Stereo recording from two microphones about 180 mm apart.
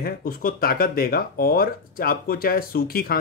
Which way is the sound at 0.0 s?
55° left (ahead or behind).